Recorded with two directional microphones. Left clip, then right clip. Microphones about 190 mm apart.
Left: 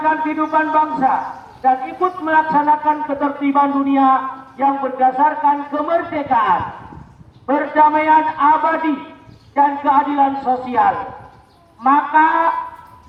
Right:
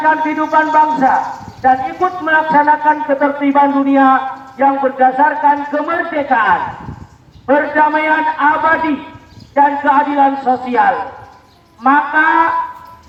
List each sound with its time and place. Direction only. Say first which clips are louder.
0.0 s a man's voice: right 4 dB; 35° right (ahead or behind)